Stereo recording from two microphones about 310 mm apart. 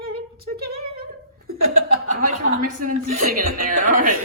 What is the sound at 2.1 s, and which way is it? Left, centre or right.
A woman's voice, right.